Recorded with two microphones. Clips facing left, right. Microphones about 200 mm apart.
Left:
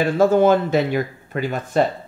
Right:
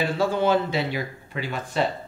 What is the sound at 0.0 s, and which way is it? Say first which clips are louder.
Speech: left 8 dB; 45° left (ahead or behind).